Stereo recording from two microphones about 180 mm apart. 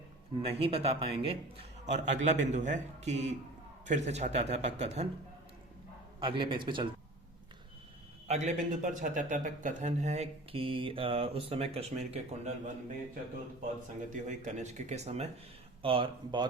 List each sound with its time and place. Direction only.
0.4 s speech: 35° right (ahead or behind)
6.1 s a man's voice: 25° right (ahead or behind)
8.3 s speech: 40° right (ahead or behind)
14.1 s a man's voice: 40° right (ahead or behind)